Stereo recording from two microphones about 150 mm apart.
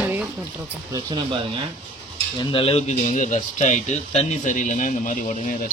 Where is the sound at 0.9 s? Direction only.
35° right (ahead or behind).